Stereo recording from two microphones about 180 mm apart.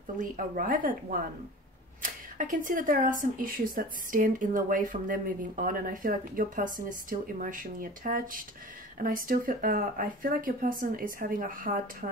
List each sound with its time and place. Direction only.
0.2 s speech: 50° right (ahead or behind)